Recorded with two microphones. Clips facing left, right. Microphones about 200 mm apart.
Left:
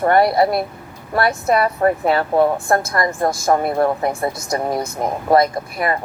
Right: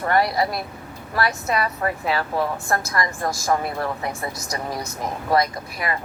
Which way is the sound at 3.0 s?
25° left (ahead or behind).